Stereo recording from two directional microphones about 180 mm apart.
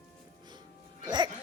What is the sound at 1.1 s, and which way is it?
Music, 25° right (ahead or behind).